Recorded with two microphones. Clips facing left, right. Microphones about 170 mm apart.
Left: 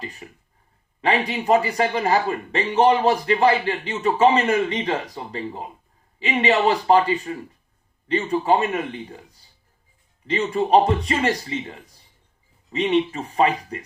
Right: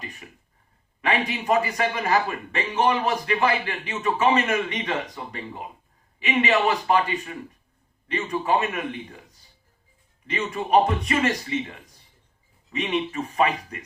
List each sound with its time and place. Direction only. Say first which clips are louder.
1.0 s speech: left 3 dB; 30° left (ahead or behind)